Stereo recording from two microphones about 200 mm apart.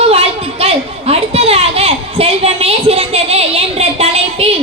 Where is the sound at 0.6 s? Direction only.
30° right (ahead or behind).